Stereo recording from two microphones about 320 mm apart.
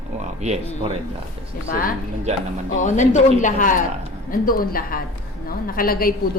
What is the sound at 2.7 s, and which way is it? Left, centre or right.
A woman's voice, left.